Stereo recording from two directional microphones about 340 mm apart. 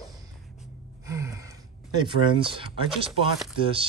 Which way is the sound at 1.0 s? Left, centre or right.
Centre.